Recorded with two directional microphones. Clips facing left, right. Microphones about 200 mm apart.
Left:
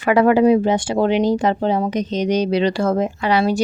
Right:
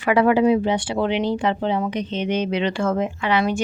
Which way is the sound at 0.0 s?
45° left (ahead or behind).